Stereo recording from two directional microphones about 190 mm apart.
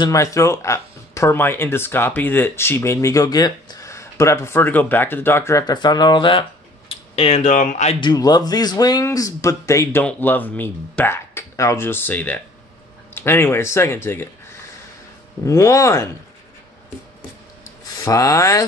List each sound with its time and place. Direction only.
0.0 s speech: 15° left (ahead or behind)
7.2 s speech: 35° left (ahead or behind)
8.0 s speech: 20° left (ahead or behind)
15.4 s speech: 15° left (ahead or behind)
18.0 s speech: 15° left (ahead or behind)